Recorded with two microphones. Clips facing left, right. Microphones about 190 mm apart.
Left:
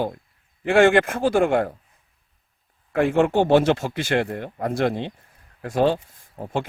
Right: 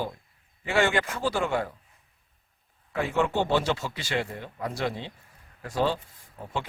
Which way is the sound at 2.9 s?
55° left (ahead or behind).